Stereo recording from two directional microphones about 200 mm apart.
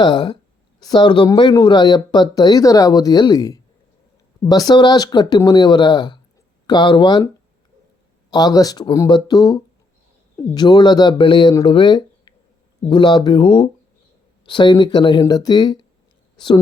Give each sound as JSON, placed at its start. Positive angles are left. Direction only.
{"t": 0.0, "sound": "speech", "side_deg": 20}
{"t": 8.3, "sound": "speech", "side_deg": 20}